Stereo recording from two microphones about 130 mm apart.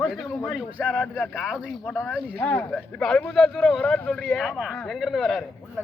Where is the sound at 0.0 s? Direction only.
Centre (ahead or behind).